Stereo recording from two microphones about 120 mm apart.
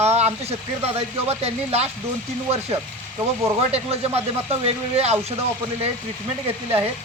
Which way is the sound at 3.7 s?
60° right (ahead or behind).